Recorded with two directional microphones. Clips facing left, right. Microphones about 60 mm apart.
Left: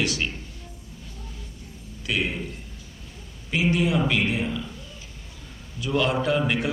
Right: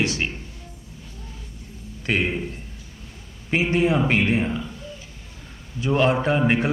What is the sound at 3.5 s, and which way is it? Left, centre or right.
Speech, right.